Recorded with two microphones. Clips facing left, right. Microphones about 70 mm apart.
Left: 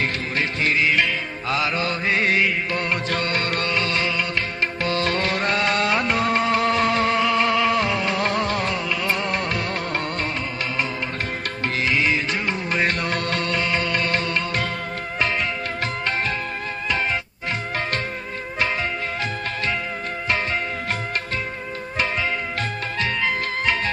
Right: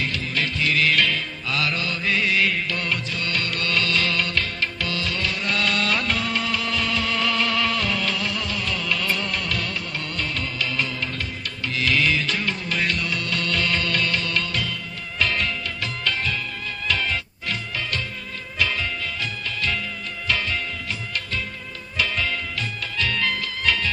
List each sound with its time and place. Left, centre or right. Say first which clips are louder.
0.0 s music: left 2 dB; left
0.7 s music: even; left
4.7 s music: left 5 dB; left
7.2 s music: left 4 dB; left
8.2 s music: left 6 dB; left
8.8 s music: left 1 dB; centre
9.1 s music: left 3 dB; left
11.8 s music: even; left
13.5 s music: right 1 dB; left
21.9 s music: left 1 dB; left